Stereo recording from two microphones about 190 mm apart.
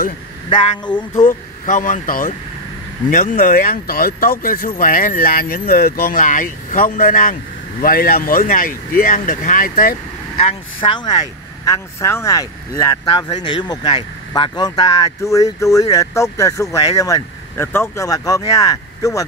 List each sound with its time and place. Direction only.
0.5 s speech: 25° left (ahead or behind)
1.2 s speech: 45° left (ahead or behind)
10.4 s speech: 25° left (ahead or behind)